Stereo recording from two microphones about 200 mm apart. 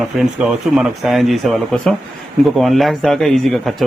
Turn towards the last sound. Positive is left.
turn(degrees=0)  # may be behind; listen again after turning